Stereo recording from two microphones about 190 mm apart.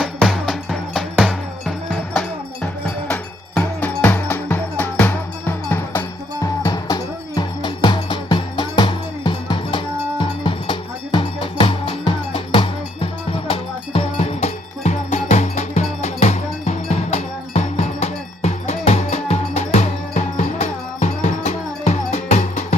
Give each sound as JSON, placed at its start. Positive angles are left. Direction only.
{"t": 0.0, "sound": "music", "side_deg": 0}